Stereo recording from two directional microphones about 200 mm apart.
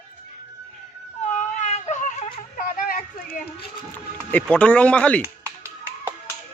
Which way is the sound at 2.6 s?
45° left (ahead or behind).